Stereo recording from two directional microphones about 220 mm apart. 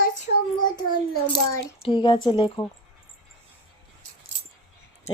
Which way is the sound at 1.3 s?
20° left (ahead or behind).